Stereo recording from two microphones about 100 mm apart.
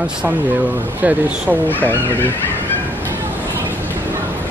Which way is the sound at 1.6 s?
20° left (ahead or behind).